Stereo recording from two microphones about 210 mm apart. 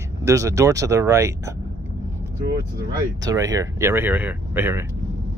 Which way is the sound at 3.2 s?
15° right (ahead or behind).